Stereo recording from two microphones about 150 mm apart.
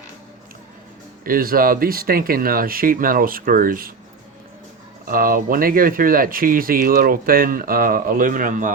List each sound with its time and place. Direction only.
1.2 s speech: 75° right (ahead or behind)
5.0 s speech: 70° right (ahead or behind)